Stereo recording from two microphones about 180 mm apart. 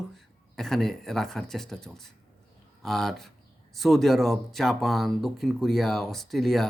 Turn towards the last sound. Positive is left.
turn(degrees=0)  # may be behind; listen again after turning